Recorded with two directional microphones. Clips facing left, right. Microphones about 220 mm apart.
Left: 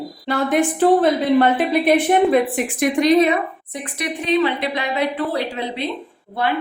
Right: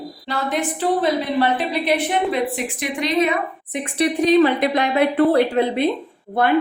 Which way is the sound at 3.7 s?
25° right (ahead or behind).